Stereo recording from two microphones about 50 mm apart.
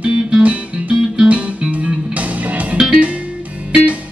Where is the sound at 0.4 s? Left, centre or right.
Right.